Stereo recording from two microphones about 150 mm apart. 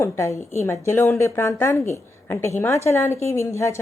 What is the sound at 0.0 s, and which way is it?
A woman's voice, 20° left (ahead or behind).